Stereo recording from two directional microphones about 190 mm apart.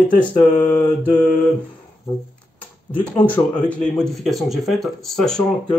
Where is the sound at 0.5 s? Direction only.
40° left (ahead or behind).